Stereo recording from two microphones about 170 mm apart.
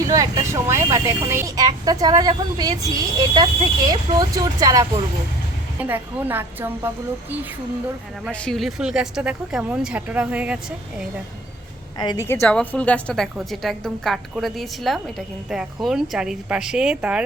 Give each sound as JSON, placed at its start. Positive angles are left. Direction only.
{"t": 0.1, "sound": "speech", "side_deg": -20}
{"t": 5.8, "sound": "speech", "side_deg": -10}
{"t": 8.3, "sound": "a woman's voice", "side_deg": 5}
{"t": 11.9, "sound": "a woman's voice", "side_deg": 25}